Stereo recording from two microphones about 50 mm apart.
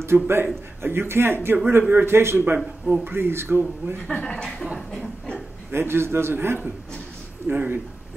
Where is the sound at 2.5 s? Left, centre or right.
Centre.